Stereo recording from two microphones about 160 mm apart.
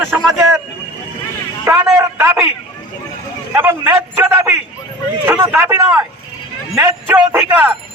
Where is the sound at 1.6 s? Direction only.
20° right (ahead or behind).